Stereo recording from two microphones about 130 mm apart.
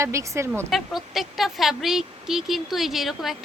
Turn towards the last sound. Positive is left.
turn(degrees=0)  # may be behind; listen again after turning